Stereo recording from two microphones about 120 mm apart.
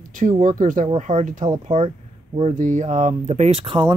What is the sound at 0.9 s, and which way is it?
Speech, 80° right.